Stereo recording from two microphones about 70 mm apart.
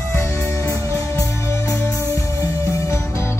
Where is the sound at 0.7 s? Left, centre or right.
Left.